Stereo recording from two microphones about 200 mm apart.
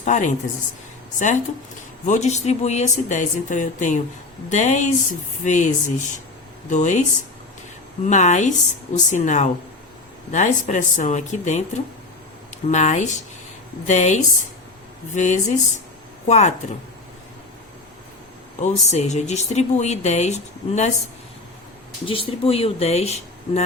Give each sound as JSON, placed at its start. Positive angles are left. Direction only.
{"t": 0.0, "sound": "speech", "side_deg": 40}
{"t": 2.0, "sound": "speech", "side_deg": 35}
{"t": 8.0, "sound": "speech", "side_deg": 35}
{"t": 12.6, "sound": "speech", "side_deg": 35}
{"t": 18.6, "sound": "speech", "side_deg": 35}
{"t": 22.0, "sound": "speech", "side_deg": 25}